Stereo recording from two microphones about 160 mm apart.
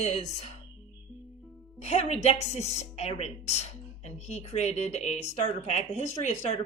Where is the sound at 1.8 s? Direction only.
45° left (ahead or behind).